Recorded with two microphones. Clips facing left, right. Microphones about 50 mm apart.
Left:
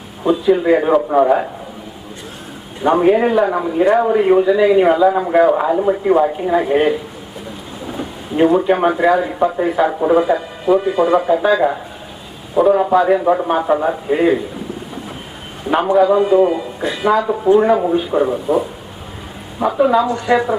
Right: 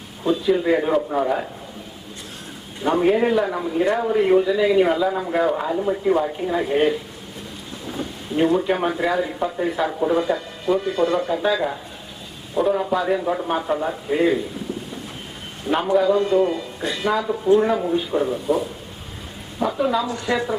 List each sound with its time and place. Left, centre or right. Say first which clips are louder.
0.5 s speech: left 6 dB; centre
2.8 s speech: left 5 dB; left
12.6 s speech: left 7 dB; centre
13.0 s speech: left 8 dB; left
15.6 s speech: left 5 dB; centre
19.8 s speech: left 9 dB; centre